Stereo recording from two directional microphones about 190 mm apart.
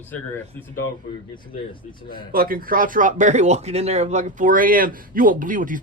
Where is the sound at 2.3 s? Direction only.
50° right (ahead or behind).